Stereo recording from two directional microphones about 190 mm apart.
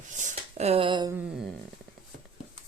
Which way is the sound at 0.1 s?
40° right (ahead or behind).